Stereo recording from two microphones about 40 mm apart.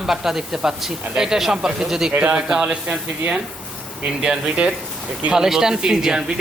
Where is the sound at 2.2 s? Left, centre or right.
Right.